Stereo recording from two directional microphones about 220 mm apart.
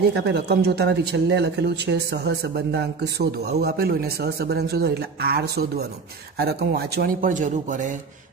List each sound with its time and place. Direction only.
0.1 s speech: 50° right (ahead or behind)